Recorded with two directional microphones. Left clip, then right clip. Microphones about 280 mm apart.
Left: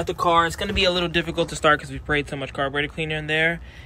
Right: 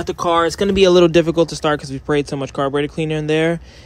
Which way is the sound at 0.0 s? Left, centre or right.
Right.